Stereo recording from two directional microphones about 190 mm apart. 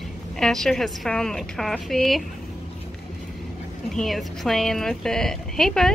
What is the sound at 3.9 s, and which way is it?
A woman's voice, centre (ahead or behind).